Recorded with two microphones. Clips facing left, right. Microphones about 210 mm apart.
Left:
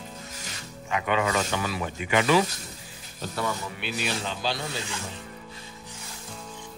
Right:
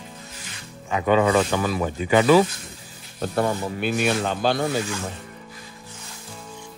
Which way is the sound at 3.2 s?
45° right (ahead or behind).